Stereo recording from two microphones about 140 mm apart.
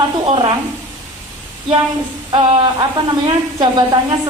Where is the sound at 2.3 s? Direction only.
35° right (ahead or behind).